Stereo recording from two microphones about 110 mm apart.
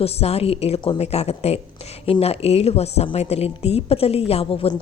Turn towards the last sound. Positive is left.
turn(degrees=65)  # may be behind; listen again after turning